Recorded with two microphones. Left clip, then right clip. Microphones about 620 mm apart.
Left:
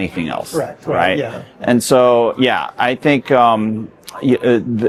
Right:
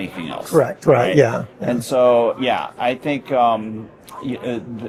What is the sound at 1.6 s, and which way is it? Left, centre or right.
Speech, left.